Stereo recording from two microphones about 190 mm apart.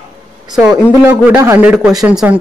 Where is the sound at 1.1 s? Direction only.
10° right (ahead or behind).